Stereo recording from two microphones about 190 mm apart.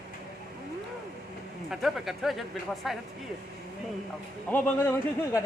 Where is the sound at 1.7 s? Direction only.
Centre (ahead or behind).